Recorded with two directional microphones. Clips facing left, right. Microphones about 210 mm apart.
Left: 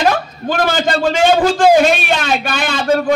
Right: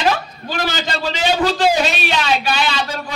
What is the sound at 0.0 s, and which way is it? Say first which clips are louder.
A man's voice: left 4 dB; 50° left (ahead or behind).